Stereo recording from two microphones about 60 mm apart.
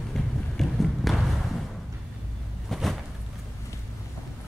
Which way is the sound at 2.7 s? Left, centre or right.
Centre.